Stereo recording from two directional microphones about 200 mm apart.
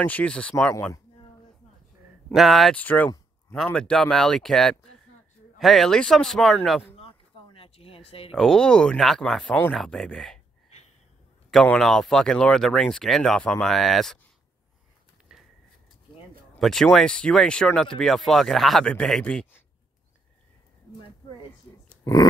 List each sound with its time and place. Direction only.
0.0 s speech: 5° left (ahead or behind)
2.2 s speech: centre (ahead or behind)
7.5 s a sound: 30° left (ahead or behind)
8.3 s speech: centre (ahead or behind)
11.5 s speech: 5° left (ahead or behind)
16.5 s speech: centre (ahead or behind)
22.1 s speech: 15° left (ahead or behind)